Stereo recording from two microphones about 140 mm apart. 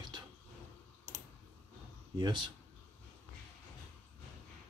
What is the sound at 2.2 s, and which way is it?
Speech, 35° right (ahead or behind).